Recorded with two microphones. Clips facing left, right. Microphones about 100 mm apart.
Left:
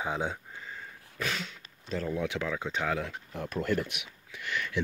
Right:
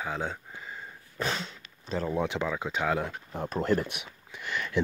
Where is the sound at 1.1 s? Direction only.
30° right (ahead or behind).